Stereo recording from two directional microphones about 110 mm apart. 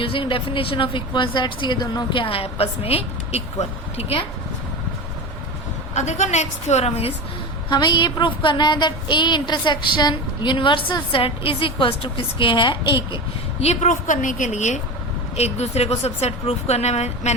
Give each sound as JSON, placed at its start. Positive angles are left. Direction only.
{"t": 0.0, "sound": "a woman's voice", "side_deg": 55}
{"t": 2.2, "sound": "a woman's voice", "side_deg": 60}
{"t": 5.9, "sound": "a woman's voice", "side_deg": 90}
{"t": 7.7, "sound": "a woman's voice", "side_deg": 45}
{"t": 13.6, "sound": "speech", "side_deg": 75}
{"t": 14.5, "sound": "a woman's voice", "side_deg": 90}
{"t": 15.4, "sound": "speech", "side_deg": 80}